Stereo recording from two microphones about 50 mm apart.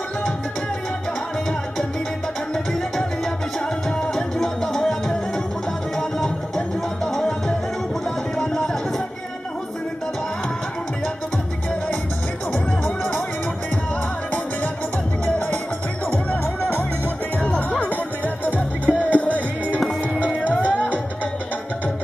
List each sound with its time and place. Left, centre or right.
4.1 s music: centre
12.5 s music: left
15.2 s music: left
17.6 s music: left
19.2 s music: right
20.6 s music: left